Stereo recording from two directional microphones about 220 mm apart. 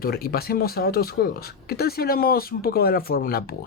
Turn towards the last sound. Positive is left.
turn(degrees=45)  # may be behind; listen again after turning